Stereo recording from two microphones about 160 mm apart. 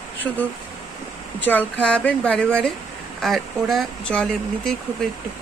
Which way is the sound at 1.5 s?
10° left (ahead or behind).